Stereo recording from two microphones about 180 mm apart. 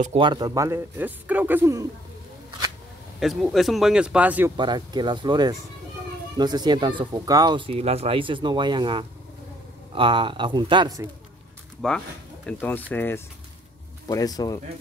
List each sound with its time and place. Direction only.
0.0 s a man's voice: 30° right (ahead or behind); by 1.9 s 15° right (ahead or behind)
3.2 s speech: centre (ahead or behind)
4.6 s speech: 25° right (ahead or behind)
11.8 s speech: 5° left (ahead or behind); by 14.6 s 20° left (ahead or behind)